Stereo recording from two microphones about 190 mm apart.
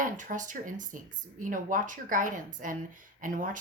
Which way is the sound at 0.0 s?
45° right (ahead or behind).